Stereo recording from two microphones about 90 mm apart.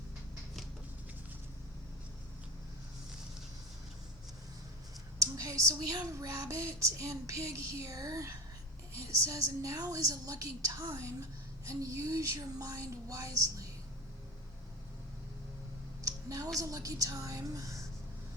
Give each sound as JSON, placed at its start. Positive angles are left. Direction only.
{"t": 5.2, "sound": "speech", "side_deg": -35}
{"t": 16.0, "sound": "a sound", "side_deg": -40}
{"t": 16.6, "sound": "speech", "side_deg": -40}